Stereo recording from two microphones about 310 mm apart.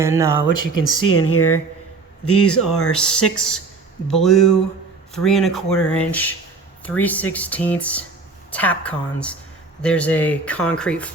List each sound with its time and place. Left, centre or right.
0.0 s speech: centre
0.8 s speech: left
2.9 s a woman's voice: centre